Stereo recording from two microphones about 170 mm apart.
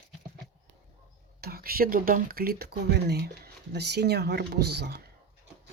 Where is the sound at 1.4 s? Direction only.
65° right (ahead or behind).